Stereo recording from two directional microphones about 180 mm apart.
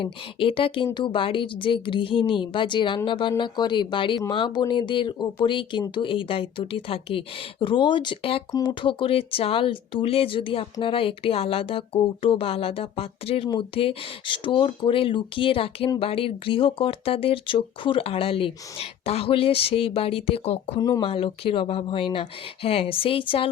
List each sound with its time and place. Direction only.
0.0 s speech: 30° left (ahead or behind)